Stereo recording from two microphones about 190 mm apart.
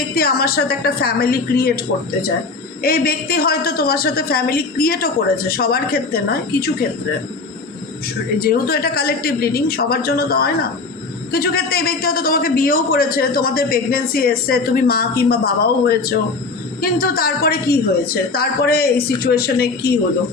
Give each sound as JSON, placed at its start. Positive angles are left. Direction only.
{"t": 0.1, "sound": "a man's voice", "side_deg": 50}
{"t": 2.8, "sound": "a man's voice", "side_deg": 50}
{"t": 8.4, "sound": "a man's voice", "side_deg": 55}